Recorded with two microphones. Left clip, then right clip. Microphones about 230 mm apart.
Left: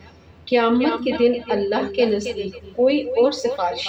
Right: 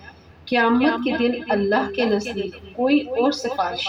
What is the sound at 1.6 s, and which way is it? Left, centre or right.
Speech, right.